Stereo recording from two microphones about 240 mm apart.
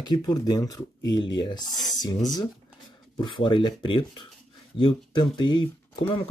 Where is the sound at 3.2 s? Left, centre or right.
Centre.